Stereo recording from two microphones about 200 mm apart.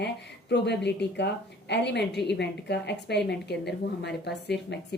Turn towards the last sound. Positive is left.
turn(degrees=60)  # may be behind; listen again after turning